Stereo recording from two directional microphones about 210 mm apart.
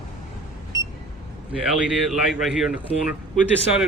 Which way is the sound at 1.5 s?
5° right (ahead or behind).